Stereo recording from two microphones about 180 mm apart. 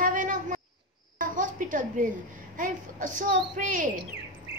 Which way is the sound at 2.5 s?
45° right (ahead or behind).